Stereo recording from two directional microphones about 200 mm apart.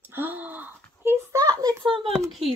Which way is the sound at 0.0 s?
10° right (ahead or behind).